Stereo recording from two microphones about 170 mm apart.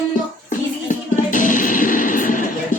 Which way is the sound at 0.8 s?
50° left (ahead or behind).